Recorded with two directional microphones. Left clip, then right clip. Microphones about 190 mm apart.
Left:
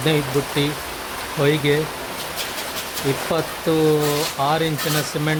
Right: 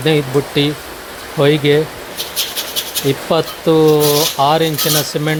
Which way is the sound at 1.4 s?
20° right (ahead or behind).